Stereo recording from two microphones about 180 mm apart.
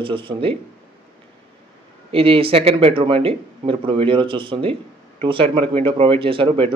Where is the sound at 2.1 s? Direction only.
30° right (ahead or behind).